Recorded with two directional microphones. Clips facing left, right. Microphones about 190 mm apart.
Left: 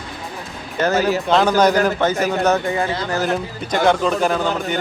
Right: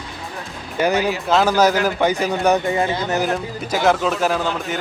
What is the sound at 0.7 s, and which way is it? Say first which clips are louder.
Speech: left 1 dB; 10° right (ahead or behind).